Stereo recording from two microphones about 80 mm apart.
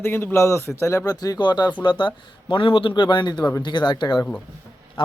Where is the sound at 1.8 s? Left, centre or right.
Left.